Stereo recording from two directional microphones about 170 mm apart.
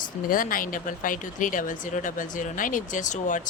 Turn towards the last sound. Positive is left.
turn(degrees=50)  # may be behind; listen again after turning